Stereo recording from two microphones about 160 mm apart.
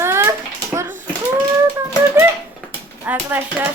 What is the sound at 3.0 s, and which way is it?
Speech, 10° right (ahead or behind).